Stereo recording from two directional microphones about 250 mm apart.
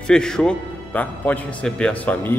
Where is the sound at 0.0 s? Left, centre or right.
Centre.